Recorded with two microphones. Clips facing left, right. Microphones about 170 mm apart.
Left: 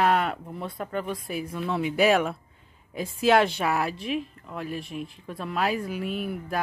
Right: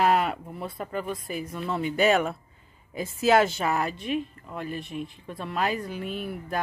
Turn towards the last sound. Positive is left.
turn(degrees=0)  # may be behind; listen again after turning